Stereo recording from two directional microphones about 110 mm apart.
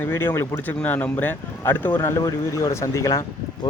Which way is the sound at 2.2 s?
30° left (ahead or behind).